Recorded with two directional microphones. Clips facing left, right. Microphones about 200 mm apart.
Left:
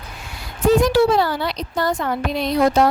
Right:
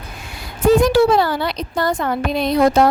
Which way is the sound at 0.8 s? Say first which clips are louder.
Right 2 dB; 55° right (ahead or behind).